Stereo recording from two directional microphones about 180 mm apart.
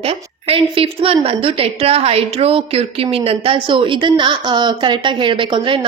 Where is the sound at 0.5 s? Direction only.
30° right (ahead or behind).